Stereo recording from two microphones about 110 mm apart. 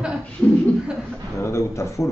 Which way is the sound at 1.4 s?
25° left (ahead or behind).